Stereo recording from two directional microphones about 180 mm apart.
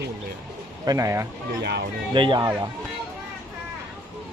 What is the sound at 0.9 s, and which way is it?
Speech, 15° right (ahead or behind).